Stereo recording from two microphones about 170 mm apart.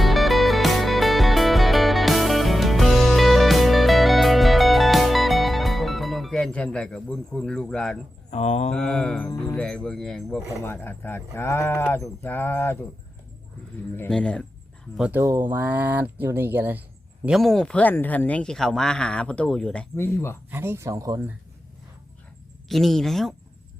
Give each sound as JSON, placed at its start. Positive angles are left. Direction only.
{"t": 0.0, "sound": "music", "side_deg": 0}
{"t": 8.3, "sound": "speech", "side_deg": 40}
{"t": 8.7, "sound": "speech", "side_deg": 5}
{"t": 10.5, "sound": "speech", "side_deg": 15}
{"t": 13.9, "sound": "speech", "side_deg": 10}
{"t": 14.9, "sound": "speech", "side_deg": -5}
{"t": 15.2, "sound": "speech", "side_deg": -15}
{"t": 17.2, "sound": "speech", "side_deg": 0}
{"t": 20.5, "sound": "speech", "side_deg": -15}
{"t": 22.7, "sound": "speech", "side_deg": 0}